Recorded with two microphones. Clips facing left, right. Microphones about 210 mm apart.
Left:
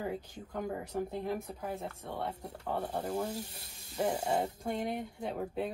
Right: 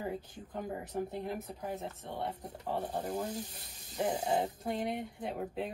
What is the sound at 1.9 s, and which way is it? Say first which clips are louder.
Speech: left 1 dB; 20° right (ahead or behind).